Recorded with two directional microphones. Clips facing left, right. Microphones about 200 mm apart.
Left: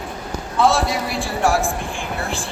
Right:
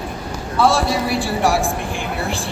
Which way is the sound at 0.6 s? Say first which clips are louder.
Right 1 dB; centre (ahead or behind).